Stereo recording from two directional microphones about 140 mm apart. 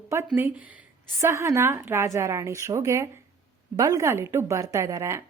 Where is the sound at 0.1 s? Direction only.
20° right (ahead or behind).